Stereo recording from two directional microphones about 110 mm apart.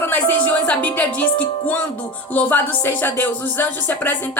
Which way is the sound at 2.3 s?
15° left (ahead or behind).